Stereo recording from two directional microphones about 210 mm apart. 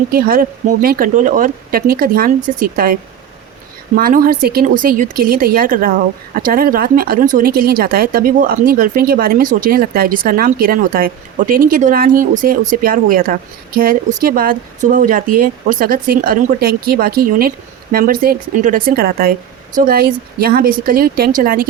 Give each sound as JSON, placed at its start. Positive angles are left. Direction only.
{"t": 0.1, "sound": "speech", "side_deg": -45}